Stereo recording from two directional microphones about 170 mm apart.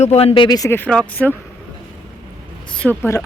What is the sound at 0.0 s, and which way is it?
Speech, 35° left (ahead or behind).